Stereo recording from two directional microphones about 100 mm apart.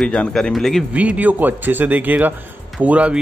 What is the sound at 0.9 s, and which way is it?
Speech, 15° right (ahead or behind).